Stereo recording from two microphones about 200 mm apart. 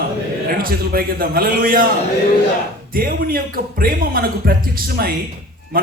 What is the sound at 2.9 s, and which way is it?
Speech, 45° right (ahead or behind).